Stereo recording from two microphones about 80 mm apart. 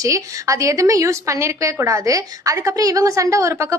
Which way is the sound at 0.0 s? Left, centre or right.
Right.